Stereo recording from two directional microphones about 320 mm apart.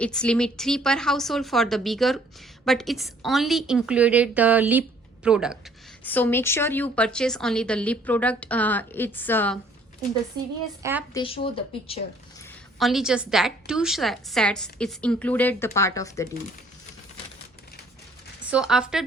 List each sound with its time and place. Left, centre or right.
0.0 s a woman's voice: centre
11.1 s speech: centre
12.4 s a woman's voice: centre
18.5 s a woman's voice: centre